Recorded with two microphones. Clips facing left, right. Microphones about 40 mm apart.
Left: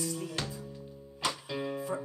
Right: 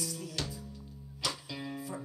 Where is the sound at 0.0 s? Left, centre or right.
Left.